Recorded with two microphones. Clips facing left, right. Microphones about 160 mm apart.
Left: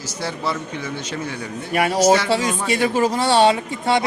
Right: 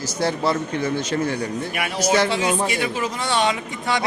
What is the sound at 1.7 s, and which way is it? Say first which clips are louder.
Speech: left 6 dB; 35° left (ahead or behind).